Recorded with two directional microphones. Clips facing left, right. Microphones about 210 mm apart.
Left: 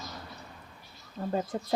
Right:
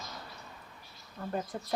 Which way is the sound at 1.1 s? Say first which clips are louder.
Left 5 dB; 25° left (ahead or behind).